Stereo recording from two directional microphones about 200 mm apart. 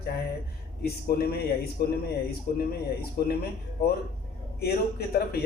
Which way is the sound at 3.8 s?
55° left (ahead or behind).